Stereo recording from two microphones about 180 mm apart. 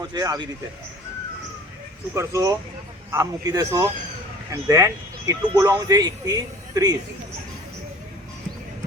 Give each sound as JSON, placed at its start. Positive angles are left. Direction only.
{"t": 0.0, "sound": "speech", "side_deg": -20}
{"t": 2.1, "sound": "speech", "side_deg": -15}